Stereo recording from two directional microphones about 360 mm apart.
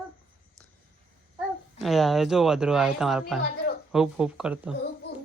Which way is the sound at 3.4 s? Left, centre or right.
Left.